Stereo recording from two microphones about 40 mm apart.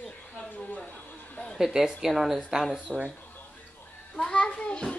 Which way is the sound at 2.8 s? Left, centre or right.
Right.